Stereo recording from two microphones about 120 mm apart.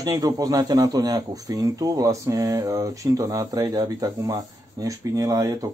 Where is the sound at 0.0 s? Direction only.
30° right (ahead or behind).